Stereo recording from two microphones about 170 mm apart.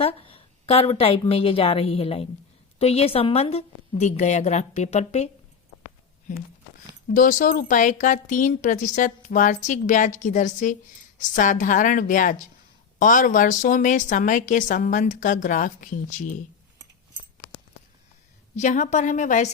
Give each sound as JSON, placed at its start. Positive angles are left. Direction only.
{"t": 0.0, "sound": "a sound", "side_deg": 35}
{"t": 1.3, "sound": "a woman's voice", "side_deg": 35}
{"t": 7.1, "sound": "a woman's voice", "side_deg": 50}
{"t": 18.5, "sound": "a woman's voice", "side_deg": 45}